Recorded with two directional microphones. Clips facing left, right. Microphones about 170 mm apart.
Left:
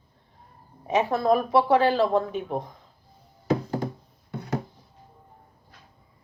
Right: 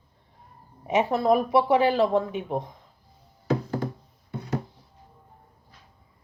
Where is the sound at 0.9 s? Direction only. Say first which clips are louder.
Even; 25° right (ahead or behind).